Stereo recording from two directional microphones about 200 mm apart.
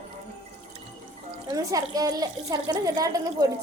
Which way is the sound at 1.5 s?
15° right (ahead or behind).